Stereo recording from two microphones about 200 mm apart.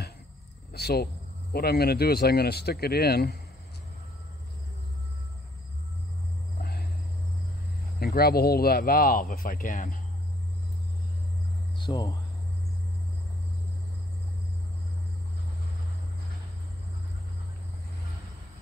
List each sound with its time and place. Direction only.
0.7 s speech: 55° left (ahead or behind)
6.6 s cricket: 50° left (ahead or behind)
8.0 s speech: 50° left (ahead or behind)
11.8 s speech: 15° left (ahead or behind)